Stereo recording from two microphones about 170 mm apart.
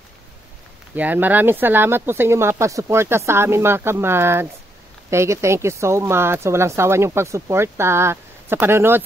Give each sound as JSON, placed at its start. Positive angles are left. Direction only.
{"t": 0.9, "sound": "speech", "side_deg": -10}